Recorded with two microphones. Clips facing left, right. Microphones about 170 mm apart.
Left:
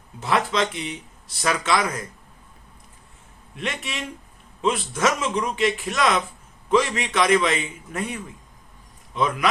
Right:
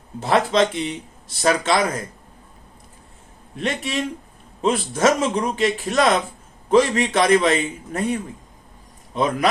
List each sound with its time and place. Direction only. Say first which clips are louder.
0.2 s a man's voice: right 5 dB; 40° right (ahead or behind)
3.5 s a man's voice: right 6 dB; 35° right (ahead or behind)